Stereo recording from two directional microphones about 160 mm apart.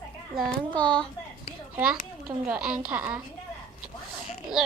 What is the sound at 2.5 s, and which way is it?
Speech, 5° right (ahead or behind).